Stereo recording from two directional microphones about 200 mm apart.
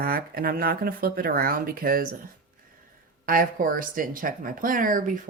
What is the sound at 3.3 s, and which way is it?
A woman's voice, 45° right (ahead or behind).